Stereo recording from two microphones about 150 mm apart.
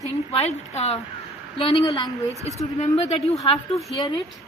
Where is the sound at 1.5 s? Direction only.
40° left (ahead or behind).